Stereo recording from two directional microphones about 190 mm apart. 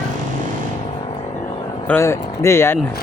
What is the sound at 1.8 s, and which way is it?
Speech, 10° left (ahead or behind).